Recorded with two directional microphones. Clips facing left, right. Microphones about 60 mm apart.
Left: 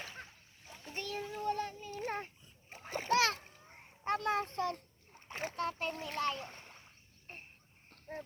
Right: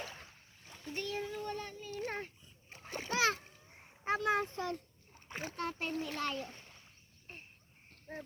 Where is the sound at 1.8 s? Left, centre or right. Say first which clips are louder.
Left 1 dB; left.